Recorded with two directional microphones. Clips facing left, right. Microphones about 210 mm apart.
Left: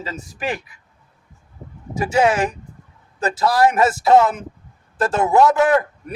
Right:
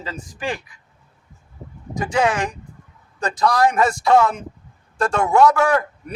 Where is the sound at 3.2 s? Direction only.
5° left (ahead or behind).